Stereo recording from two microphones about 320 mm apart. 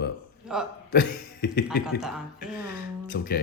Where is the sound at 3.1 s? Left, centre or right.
Left.